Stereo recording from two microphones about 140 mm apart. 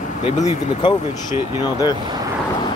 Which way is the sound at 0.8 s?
35° left (ahead or behind).